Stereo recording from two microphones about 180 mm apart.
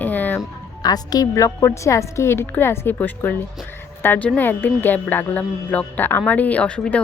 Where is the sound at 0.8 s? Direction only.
20° left (ahead or behind).